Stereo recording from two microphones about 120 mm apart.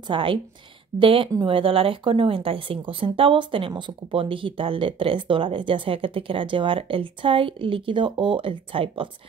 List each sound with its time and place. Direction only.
0.1 s speech: 45° right (ahead or behind)